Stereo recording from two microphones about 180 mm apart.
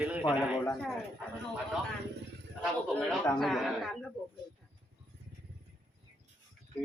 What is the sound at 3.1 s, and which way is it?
Speech, centre (ahead or behind).